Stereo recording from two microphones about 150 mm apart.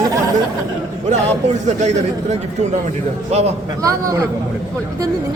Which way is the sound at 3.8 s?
20° right (ahead or behind).